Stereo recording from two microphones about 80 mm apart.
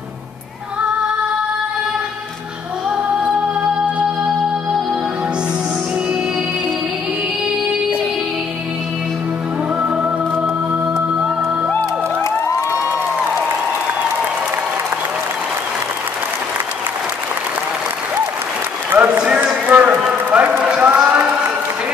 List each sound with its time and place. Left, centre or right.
9.8 s music: centre
18.9 s run: centre